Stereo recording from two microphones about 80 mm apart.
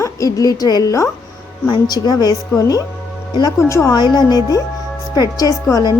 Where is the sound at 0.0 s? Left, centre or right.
Left.